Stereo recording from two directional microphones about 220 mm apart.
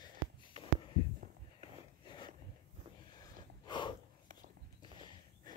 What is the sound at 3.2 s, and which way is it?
Gasp, 20° left (ahead or behind).